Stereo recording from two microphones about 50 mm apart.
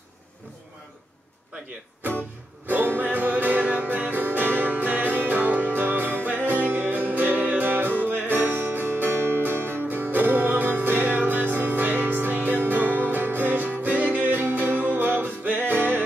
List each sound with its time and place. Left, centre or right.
2.6 s music: right